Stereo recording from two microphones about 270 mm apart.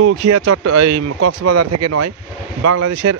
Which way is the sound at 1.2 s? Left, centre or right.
Right.